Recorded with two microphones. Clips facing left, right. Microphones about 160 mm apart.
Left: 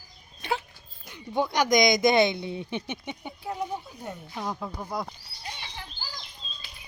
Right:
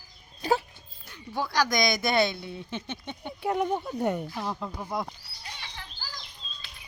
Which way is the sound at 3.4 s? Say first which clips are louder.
Right 6 dB; 70° right (ahead or behind).